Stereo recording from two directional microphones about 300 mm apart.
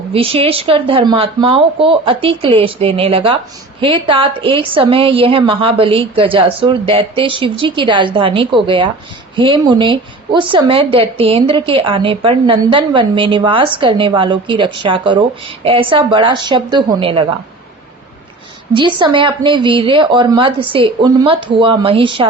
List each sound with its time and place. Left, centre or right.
0.1 s a woman's voice: centre
18.7 s a woman's voice: centre